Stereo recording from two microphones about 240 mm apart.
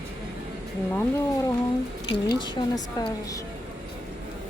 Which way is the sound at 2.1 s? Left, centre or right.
Centre.